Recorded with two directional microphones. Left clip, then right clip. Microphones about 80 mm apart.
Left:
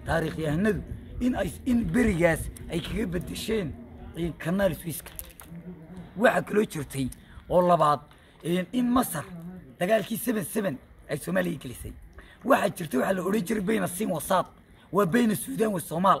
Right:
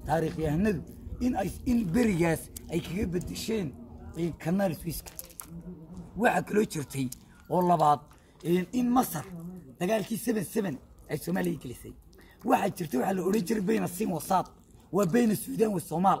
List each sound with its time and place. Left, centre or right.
0.0 s a man's voice: left; by 2.4 s centre
2.7 s a man's voice: left
6.1 s a man's voice: centre
7.4 s a man's voice: left